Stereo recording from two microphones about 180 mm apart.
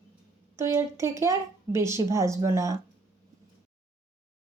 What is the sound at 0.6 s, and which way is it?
Speech, 15° right (ahead or behind).